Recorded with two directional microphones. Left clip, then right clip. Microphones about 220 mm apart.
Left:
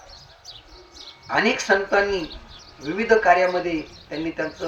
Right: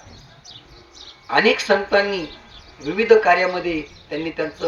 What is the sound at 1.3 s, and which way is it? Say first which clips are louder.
Speech: right 3 dB; 40° right (ahead or behind).